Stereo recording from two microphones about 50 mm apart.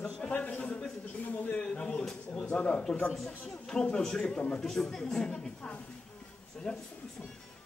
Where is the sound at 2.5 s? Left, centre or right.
Left.